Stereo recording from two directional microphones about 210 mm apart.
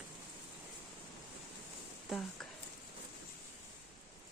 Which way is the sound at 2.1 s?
Centre (ahead or behind).